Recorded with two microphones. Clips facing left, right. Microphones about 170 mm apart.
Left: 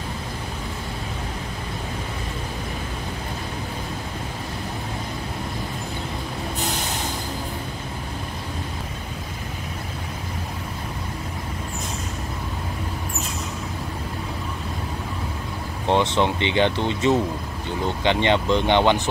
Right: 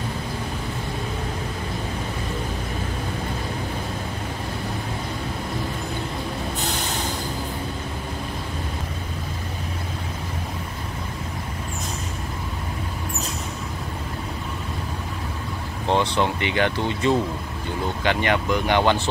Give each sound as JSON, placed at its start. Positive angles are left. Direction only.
{"t": 15.9, "sound": "speech", "side_deg": 20}